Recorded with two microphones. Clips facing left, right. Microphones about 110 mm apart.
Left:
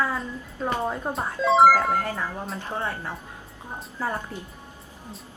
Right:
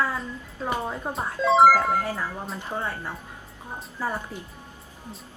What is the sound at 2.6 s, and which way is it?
Speech, 15° right (ahead or behind).